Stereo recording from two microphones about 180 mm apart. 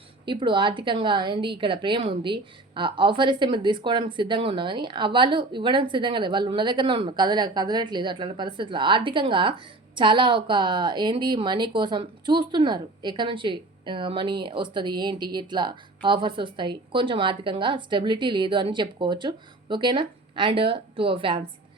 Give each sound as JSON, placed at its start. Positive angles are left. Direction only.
{"t": 0.3, "sound": "a woman's voice", "side_deg": -25}